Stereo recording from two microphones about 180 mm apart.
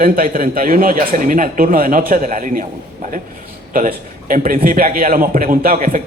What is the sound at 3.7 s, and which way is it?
A man's voice, 50° right (ahead or behind).